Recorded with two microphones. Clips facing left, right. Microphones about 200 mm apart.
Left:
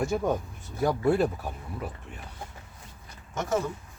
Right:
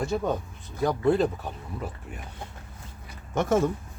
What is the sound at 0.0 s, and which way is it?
Speech, 15° left (ahead or behind).